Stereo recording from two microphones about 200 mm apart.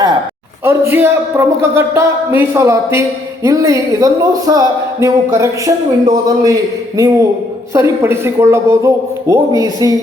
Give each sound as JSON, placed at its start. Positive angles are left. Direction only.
{"t": 0.6, "sound": "speech", "side_deg": -10}